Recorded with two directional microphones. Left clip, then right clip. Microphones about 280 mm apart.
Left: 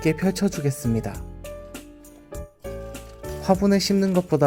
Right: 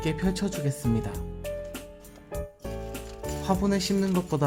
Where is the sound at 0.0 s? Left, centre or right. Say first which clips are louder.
Left 6 dB; centre.